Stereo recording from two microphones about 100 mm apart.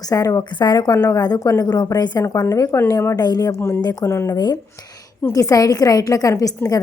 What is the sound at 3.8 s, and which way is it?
A woman's voice, 40° left (ahead or behind).